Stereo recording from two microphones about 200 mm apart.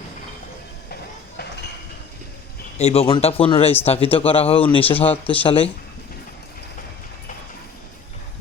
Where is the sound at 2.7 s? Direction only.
30° left (ahead or behind).